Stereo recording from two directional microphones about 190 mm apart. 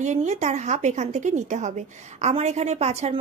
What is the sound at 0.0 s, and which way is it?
A woman's voice, 40° right (ahead or behind).